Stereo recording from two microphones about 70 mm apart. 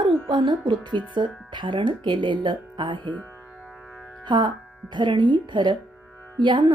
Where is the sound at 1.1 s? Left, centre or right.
Right.